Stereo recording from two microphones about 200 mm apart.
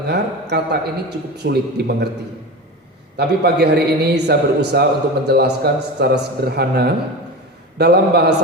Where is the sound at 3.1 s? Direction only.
55° right (ahead or behind).